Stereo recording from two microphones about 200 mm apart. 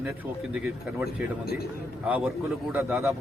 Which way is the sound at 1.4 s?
50° left (ahead or behind).